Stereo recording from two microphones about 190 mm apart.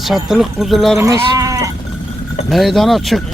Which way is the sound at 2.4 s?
Centre (ahead or behind).